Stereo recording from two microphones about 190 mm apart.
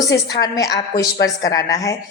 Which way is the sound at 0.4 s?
20° left (ahead or behind).